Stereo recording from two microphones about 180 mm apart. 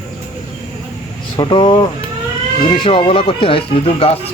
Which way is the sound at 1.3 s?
25° left (ahead or behind).